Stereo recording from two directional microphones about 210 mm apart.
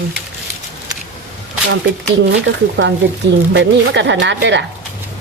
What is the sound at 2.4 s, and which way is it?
Speech, 60° right (ahead or behind).